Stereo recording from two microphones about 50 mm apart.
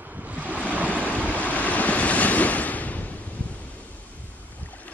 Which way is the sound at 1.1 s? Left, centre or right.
Left.